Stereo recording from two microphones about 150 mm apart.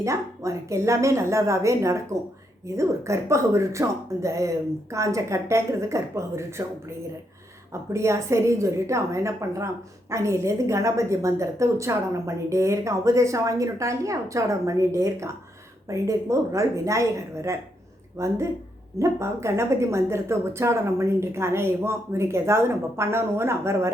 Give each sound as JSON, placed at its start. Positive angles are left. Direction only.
{"t": 0.0, "sound": "a woman's voice", "side_deg": -20}
{"t": 7.7, "sound": "a woman's voice", "side_deg": -20}